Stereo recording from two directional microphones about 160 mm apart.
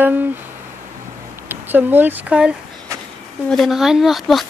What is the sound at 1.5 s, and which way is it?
Speech, 10° right (ahead or behind).